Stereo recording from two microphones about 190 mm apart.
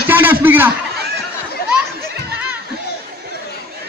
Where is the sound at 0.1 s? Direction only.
10° right (ahead or behind).